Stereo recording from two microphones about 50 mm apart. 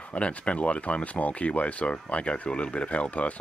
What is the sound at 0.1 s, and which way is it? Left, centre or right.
Speech, left.